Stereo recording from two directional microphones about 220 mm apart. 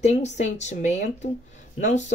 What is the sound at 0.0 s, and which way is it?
Speech, 30° left (ahead or behind).